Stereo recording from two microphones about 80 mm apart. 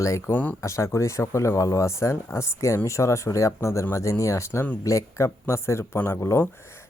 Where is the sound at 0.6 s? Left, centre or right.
Left.